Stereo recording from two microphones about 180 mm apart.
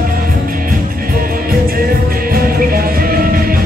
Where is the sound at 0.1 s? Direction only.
50° right (ahead or behind).